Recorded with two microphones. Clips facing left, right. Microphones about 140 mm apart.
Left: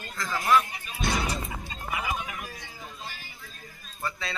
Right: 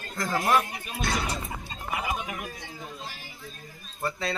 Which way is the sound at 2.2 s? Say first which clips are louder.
Right 2 dB; 50° right (ahead or behind).